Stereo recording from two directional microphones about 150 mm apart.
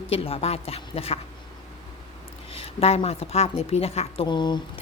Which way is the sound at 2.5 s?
40° left (ahead or behind).